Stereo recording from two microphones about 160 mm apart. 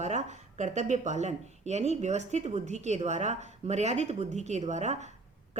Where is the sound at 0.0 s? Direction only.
45° right (ahead or behind).